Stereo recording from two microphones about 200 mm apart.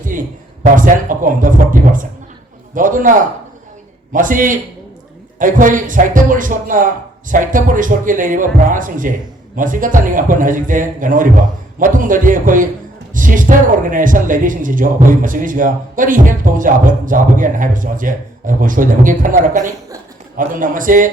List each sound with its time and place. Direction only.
0.0 s speech: 40° right (ahead or behind)